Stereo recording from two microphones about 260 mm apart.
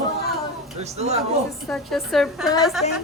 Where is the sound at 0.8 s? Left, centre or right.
Right.